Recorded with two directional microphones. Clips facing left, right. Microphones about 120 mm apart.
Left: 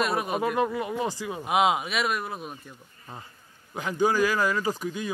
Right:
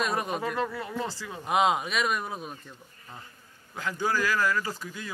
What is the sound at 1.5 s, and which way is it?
Speech, 5° left (ahead or behind).